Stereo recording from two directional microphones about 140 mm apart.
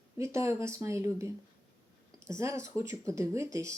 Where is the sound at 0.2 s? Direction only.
20° right (ahead or behind).